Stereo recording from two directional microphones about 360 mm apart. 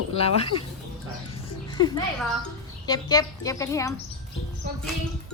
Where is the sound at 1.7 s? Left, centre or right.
Centre.